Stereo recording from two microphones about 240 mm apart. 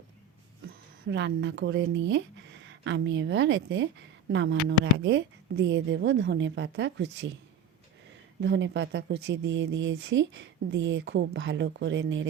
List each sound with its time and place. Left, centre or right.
1.0 s speech: right
8.4 s speech: right